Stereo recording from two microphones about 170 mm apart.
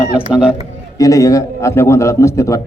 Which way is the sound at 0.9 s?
20° left (ahead or behind).